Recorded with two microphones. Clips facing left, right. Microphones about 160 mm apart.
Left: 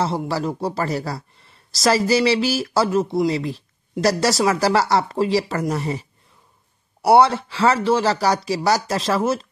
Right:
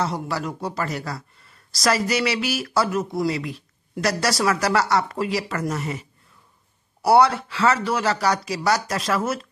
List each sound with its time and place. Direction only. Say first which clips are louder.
0.0 s speech: left 3 dB; 30° left (ahead or behind)
7.1 s speech: left 2 dB; 25° left (ahead or behind)